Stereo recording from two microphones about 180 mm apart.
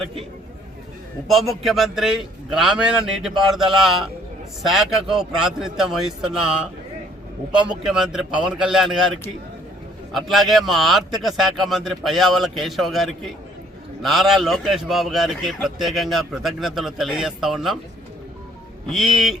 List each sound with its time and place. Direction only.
1.3 s speech: centre (ahead or behind)
10.2 s speech: centre (ahead or behind)
18.9 s speech: centre (ahead or behind)